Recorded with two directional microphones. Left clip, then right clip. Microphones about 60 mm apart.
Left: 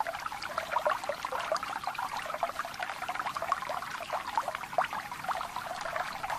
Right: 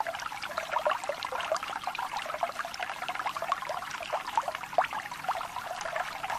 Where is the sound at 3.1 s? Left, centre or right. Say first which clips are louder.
Right 1 dB; right.